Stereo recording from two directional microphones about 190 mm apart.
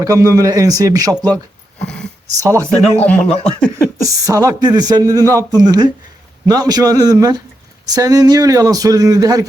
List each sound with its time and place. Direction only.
0.0 s speech: 15° right (ahead or behind)
1.8 s dog: 5° left (ahead or behind)
2.4 s speech: 15° right (ahead or behind)
2.8 s speech: 10° left (ahead or behind)
4.0 s a man's voice: 15° right (ahead or behind)